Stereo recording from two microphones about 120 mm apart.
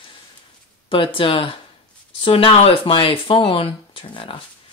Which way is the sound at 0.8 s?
45° left (ahead or behind).